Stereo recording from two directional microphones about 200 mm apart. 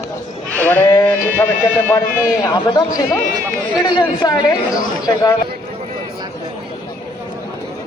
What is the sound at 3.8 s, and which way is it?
A woman's voice, 20° left (ahead or behind).